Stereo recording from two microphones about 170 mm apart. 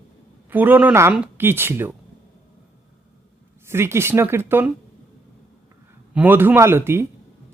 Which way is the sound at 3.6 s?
15° right (ahead or behind).